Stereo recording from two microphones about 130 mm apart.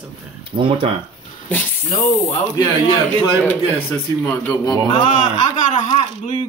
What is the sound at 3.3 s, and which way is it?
Speech, 15° left (ahead or behind).